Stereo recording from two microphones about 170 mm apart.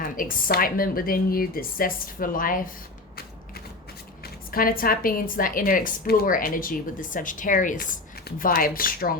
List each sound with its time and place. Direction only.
0.0 s a woman's voice: 55° left (ahead or behind)
4.2 s a woman's voice: 60° left (ahead or behind)